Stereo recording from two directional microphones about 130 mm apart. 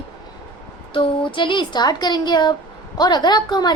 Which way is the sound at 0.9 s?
40° left (ahead or behind).